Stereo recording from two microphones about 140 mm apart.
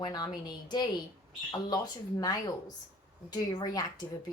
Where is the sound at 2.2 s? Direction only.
25° left (ahead or behind).